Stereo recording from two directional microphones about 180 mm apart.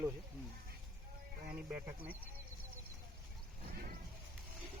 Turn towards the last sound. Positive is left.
turn(degrees=-55)  # may be behind; listen again after turning